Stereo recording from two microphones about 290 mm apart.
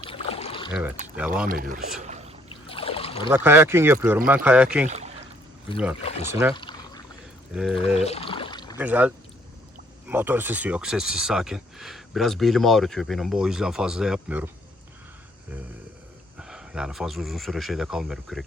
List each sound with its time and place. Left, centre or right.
0.1 s rowboat: left
1.0 s speech: centre
1.5 s speech: right
2.0 s boat: right
2.6 s boat: centre
3.2 s speech: centre
4.9 s a sound: right
6.0 s speech: left
6.5 s pour: centre
7.5 s speech: centre
7.9 s a sound: left
8.8 s speech: centre
16.4 s speech: centre